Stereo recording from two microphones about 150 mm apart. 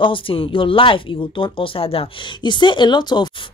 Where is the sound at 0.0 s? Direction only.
35° left (ahead or behind).